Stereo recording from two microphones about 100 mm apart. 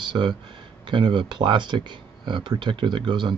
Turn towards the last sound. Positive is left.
turn(degrees=-50)  # may be behind; listen again after turning